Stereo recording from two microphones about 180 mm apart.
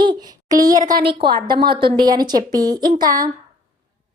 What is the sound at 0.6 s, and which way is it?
Speech, 50° right (ahead or behind).